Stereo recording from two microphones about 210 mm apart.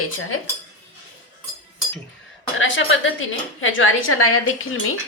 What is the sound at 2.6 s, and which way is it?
Speech, 65° left (ahead or behind).